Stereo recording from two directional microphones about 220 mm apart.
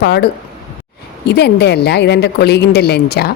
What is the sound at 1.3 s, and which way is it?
Speech, 50° left (ahead or behind).